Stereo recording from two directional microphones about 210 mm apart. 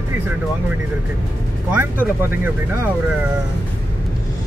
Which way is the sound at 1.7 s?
10° right (ahead or behind).